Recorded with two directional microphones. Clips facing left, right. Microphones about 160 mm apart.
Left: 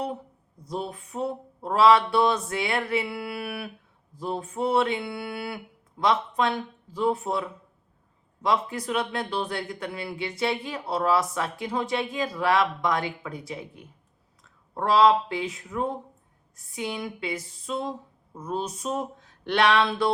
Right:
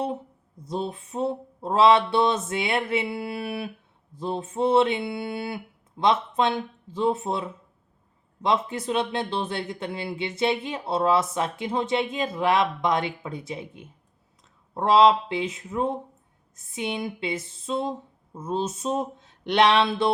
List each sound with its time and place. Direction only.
0.7 s speech: 25° right (ahead or behind)